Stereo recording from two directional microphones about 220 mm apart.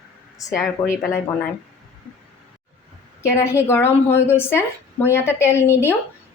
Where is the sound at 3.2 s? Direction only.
10° left (ahead or behind).